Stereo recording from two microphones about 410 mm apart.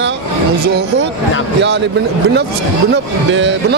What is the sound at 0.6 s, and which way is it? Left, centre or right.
Speech, right.